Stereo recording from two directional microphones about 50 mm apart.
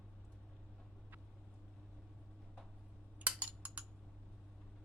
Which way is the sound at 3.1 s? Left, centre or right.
Right.